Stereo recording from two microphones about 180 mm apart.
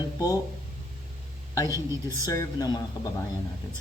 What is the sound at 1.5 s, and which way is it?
A woman's voice, 20° left (ahead or behind).